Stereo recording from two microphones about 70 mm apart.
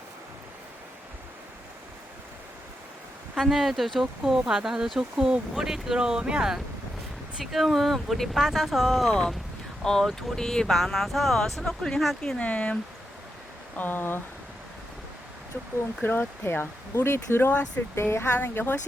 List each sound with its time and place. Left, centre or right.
3.3 s speech: centre
9.8 s speech: centre
12.2 s speech: centre
16.0 s speech: left